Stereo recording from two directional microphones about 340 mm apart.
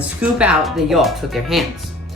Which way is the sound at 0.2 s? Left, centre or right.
Centre.